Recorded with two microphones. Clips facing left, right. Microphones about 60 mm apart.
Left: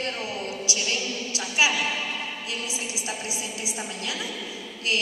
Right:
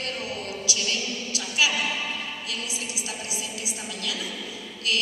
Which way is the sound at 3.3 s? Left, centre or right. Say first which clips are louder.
Left 1 dB; left.